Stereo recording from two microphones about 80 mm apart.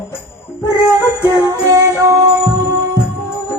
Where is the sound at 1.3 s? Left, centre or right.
Right.